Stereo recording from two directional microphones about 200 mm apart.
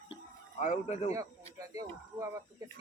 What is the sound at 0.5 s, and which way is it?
Speech, 35° left (ahead or behind).